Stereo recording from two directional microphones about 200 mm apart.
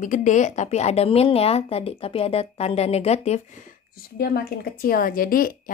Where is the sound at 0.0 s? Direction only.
40° left (ahead or behind).